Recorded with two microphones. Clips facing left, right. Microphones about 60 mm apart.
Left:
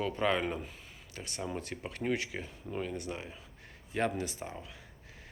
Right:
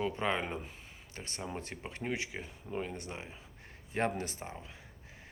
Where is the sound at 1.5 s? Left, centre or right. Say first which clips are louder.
Left 3 dB; right.